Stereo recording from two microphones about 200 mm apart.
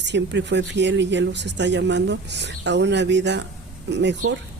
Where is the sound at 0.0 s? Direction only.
60° right (ahead or behind).